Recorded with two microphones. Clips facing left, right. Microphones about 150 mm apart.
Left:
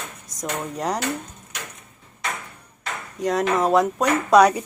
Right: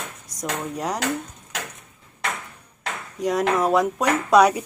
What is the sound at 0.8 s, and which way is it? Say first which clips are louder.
Speech: left 3 dB; 5° right (ahead or behind).